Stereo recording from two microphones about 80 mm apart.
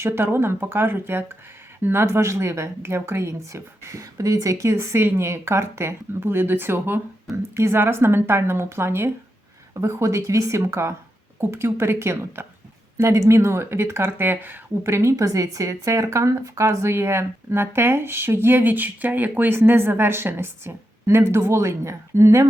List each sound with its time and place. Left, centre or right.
0.0 s speech: right
15.1 s speech: right